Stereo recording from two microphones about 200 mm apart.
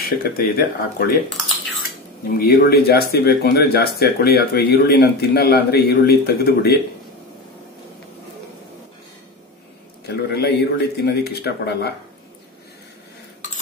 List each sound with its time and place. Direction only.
0.0 s speech: 50° left (ahead or behind)
2.2 s speech: 45° left (ahead or behind)
10.0 s speech: 55° left (ahead or behind)